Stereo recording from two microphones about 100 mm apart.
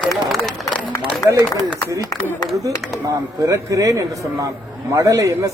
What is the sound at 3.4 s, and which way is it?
A man's voice, 30° right (ahead or behind).